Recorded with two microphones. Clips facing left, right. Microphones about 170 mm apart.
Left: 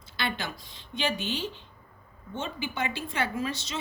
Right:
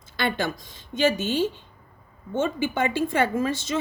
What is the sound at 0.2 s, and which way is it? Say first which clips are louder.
A woman's voice: right 7 dB; 50° right (ahead or behind).